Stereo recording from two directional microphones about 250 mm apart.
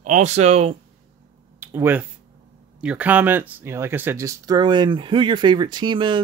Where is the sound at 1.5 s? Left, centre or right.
Centre.